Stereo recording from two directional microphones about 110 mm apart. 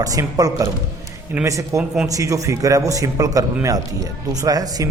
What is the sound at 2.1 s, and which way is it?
Speech, 30° right (ahead or behind).